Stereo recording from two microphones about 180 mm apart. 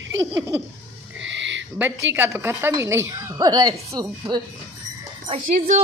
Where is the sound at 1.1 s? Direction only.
90° right.